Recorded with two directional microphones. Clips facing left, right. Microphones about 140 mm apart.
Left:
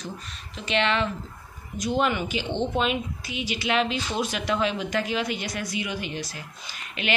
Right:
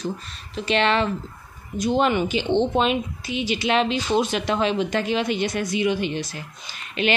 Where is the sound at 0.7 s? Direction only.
35° right (ahead or behind).